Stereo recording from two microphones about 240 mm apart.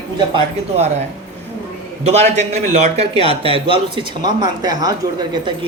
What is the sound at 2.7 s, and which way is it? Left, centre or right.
Speech, right.